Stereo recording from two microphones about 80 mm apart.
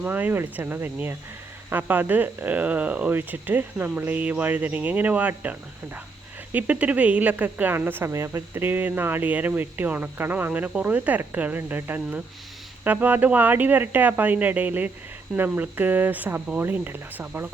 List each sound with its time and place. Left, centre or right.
0.0 s speech: right